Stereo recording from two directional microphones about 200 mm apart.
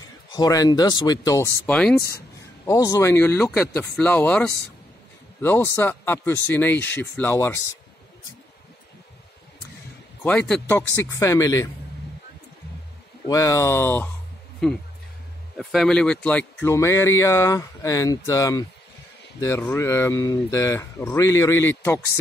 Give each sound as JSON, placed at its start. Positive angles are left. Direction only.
{"t": 0.3, "sound": "speech", "side_deg": 20}
{"t": 1.7, "sound": "speech", "side_deg": 5}
{"t": 2.6, "sound": "speech", "side_deg": 15}
{"t": 10.2, "sound": "speech", "side_deg": 5}
{"t": 13.3, "sound": "speech", "side_deg": 15}
{"t": 15.5, "sound": "speech", "side_deg": 0}